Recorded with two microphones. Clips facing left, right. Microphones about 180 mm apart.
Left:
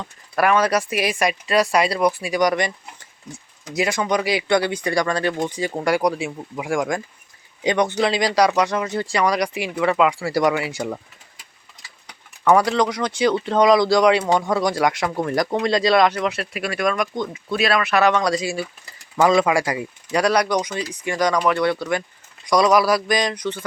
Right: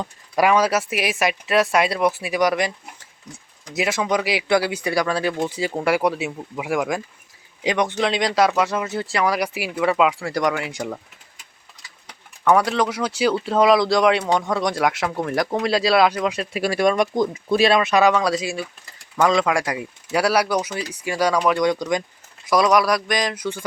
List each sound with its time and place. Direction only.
0.3 s speech: 10° right (ahead or behind)
3.8 s speech: 5° right (ahead or behind)
12.5 s speech: centre (ahead or behind)
16.5 s speech: 30° right (ahead or behind)
18.0 s speech: 5° right (ahead or behind)
22.4 s speech: centre (ahead or behind)